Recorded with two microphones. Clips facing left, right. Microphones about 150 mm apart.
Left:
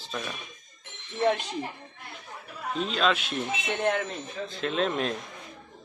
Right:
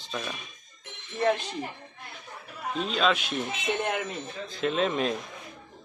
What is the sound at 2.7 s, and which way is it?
Speech, centre (ahead or behind).